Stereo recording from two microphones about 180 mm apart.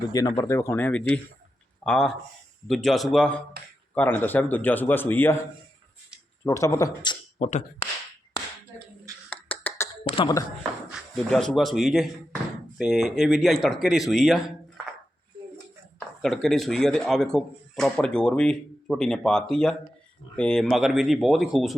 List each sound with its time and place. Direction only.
0.1 s speech: 20° left (ahead or behind)
6.4 s speech: 15° left (ahead or behind); by 7.9 s 35° left (ahead or behind)
9.3 s beatboxing: 10° left (ahead or behind)
10.0 s speech: 30° left (ahead or behind)
10.9 s speech: 5° left (ahead or behind)
16.0 s speech: centre (ahead or behind)